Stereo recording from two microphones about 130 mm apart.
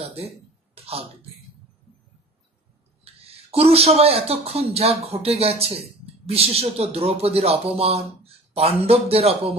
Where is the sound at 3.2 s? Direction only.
50° right (ahead or behind).